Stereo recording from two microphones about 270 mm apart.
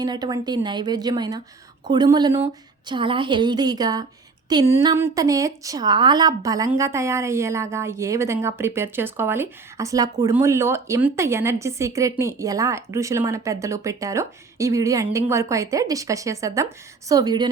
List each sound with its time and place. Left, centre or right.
0.0 s speech: centre